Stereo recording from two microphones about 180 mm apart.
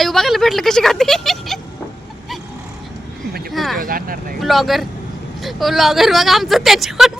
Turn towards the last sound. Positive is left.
turn(degrees=0)  # may be behind; listen again after turning